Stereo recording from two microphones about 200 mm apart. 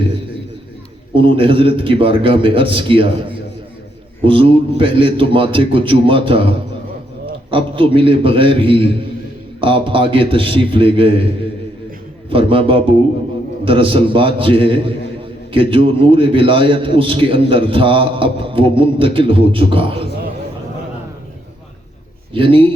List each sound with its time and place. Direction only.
1.1 s a man's voice: 25° right (ahead or behind)
7.5 s a man's voice: 25° right (ahead or behind)
12.3 s a man's voice: 25° right (ahead or behind)
22.3 s speech: 25° right (ahead or behind)